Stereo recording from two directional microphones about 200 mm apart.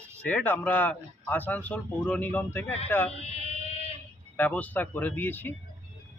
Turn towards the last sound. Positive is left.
turn(degrees=10)  # may be behind; listen again after turning